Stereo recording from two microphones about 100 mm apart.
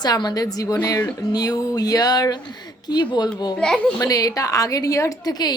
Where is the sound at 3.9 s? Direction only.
35° left (ahead or behind).